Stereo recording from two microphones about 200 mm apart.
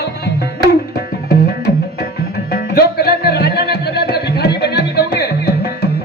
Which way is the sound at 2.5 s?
50° left (ahead or behind).